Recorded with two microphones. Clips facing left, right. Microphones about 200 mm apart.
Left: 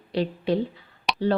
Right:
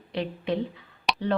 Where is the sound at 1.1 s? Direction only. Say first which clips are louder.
Even; centre (ahead or behind).